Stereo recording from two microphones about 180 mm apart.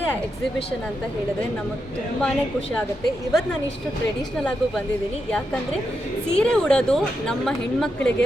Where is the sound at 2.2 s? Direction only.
5° left (ahead or behind).